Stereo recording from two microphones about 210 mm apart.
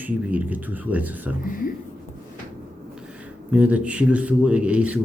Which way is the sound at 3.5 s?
5° right (ahead or behind).